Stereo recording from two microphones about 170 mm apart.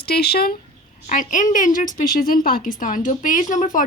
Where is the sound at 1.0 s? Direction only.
50° left (ahead or behind).